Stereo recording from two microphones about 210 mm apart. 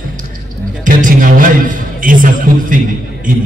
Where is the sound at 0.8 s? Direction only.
40° right (ahead or behind).